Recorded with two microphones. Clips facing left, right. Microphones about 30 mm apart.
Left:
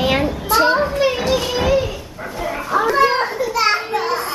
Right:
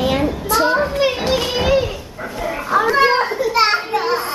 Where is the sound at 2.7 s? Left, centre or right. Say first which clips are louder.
Right 1 dB; centre.